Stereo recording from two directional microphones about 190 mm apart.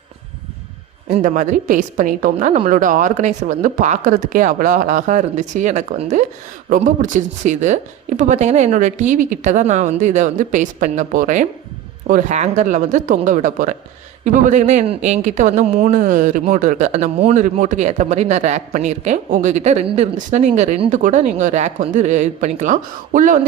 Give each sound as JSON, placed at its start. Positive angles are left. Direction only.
{"t": 1.0, "sound": "a woman's voice", "side_deg": -35}